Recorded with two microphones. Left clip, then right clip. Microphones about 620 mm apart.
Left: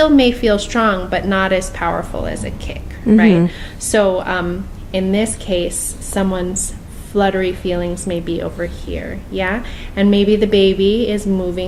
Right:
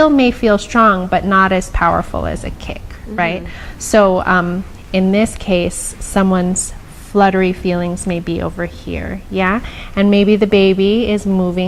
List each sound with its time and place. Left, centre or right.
0.0 s a woman's voice: right
3.9 s a woman's voice: right